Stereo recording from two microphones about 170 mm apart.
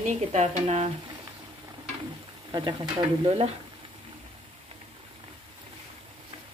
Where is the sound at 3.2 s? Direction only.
40° right (ahead or behind).